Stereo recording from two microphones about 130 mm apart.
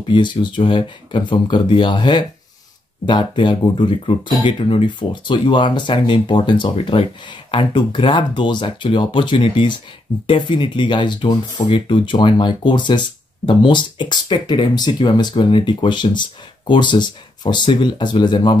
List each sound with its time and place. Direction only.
0.1 s speech: 35° left (ahead or behind)